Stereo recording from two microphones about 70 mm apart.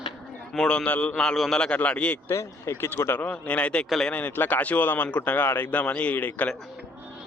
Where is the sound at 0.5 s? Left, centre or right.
Centre.